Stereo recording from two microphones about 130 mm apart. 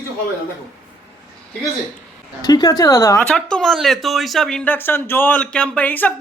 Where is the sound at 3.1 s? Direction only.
5° left (ahead or behind).